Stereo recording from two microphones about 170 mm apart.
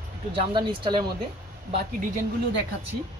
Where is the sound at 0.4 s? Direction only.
30° right (ahead or behind).